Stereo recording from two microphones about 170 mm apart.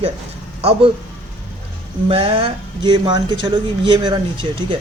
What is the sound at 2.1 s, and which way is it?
Speech, 35° right (ahead or behind).